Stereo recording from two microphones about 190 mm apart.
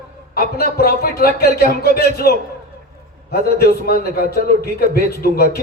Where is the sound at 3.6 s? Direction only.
55° left (ahead or behind).